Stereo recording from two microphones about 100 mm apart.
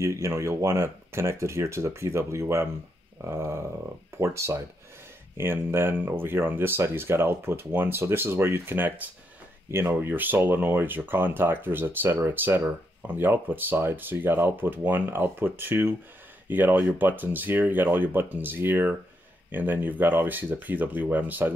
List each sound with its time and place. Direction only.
0.0 s speech: 30° right (ahead or behind)